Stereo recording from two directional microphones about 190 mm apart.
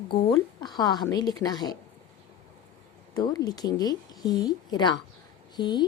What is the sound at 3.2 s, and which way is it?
A woman's voice, 20° left (ahead or behind).